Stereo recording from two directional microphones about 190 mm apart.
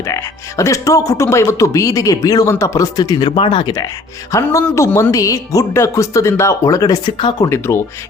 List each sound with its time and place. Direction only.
0.0 s speech: 15° left (ahead or behind)